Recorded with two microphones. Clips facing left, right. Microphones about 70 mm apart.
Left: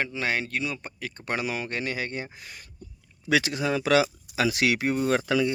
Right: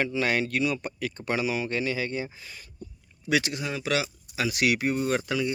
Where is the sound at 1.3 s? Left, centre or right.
Left.